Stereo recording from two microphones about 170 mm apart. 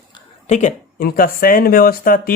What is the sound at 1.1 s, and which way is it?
Speech, 60° left (ahead or behind).